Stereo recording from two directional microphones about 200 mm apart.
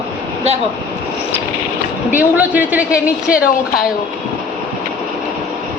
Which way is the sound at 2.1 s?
10° right (ahead or behind).